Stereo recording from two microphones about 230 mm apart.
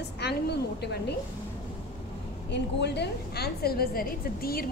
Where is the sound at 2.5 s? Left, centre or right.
Left.